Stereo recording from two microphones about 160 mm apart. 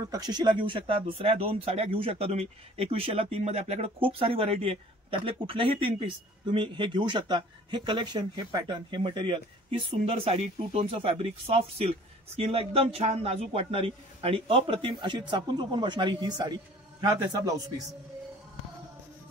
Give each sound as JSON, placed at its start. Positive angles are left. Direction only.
{"t": 0.1, "sound": "a man's voice", "side_deg": -25}